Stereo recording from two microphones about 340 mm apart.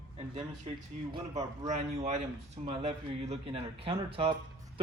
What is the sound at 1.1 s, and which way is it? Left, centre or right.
Speech, centre.